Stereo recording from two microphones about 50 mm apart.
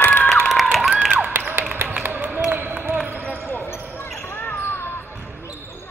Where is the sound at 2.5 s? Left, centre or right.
Right.